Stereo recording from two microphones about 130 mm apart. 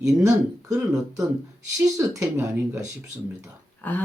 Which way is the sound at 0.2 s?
25° right (ahead or behind).